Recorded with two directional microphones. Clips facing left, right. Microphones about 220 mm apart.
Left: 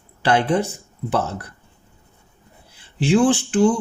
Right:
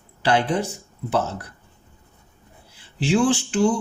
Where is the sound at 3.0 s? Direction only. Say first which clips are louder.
Left 3 dB; 55° left (ahead or behind).